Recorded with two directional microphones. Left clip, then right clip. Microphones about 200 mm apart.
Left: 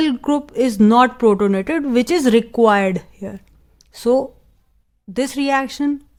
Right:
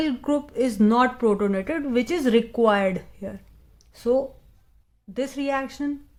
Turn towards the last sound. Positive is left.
turn(degrees=35)  # may be behind; listen again after turning